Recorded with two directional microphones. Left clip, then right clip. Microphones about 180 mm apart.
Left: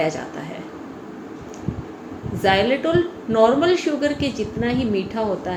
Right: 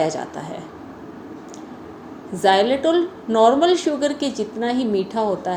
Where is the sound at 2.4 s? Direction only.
40° right (ahead or behind).